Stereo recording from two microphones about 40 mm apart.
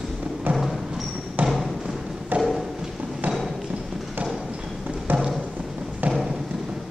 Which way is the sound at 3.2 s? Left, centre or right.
Right.